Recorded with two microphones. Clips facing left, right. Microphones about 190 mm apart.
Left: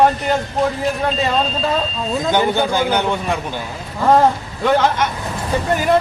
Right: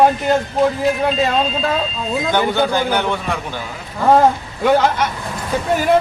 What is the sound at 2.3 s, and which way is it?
A man's voice, 15° left (ahead or behind).